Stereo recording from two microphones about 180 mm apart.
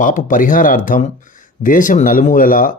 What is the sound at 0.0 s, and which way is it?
Speech, 45° left (ahead or behind).